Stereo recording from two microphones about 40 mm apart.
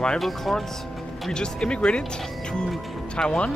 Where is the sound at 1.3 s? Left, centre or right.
Left.